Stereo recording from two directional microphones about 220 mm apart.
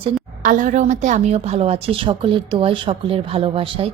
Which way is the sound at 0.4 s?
35° right (ahead or behind).